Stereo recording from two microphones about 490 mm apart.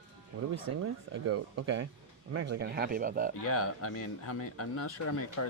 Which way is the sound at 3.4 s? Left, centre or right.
Left.